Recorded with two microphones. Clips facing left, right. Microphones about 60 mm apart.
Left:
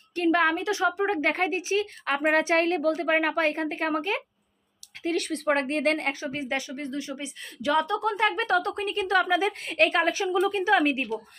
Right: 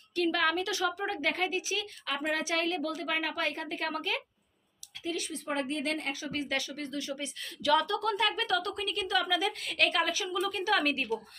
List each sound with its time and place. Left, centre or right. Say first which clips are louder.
0.1 s a woman's voice: left 6 dB; left
5.0 s a woman's voice: left 9 dB; left